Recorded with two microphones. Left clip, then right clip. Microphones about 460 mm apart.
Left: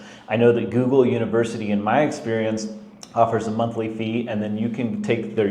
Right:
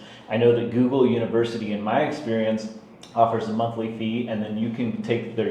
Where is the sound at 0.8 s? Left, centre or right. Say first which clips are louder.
Left 2 dB; left.